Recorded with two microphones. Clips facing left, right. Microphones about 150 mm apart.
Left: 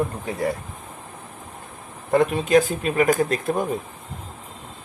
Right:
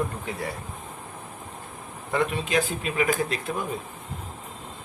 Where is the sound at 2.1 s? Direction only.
45° left (ahead or behind).